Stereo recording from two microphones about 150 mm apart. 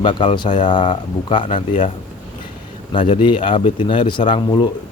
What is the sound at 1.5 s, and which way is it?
Speech, 55° left (ahead or behind).